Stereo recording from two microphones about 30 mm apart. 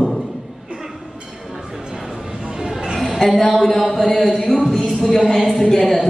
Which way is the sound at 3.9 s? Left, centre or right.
Centre.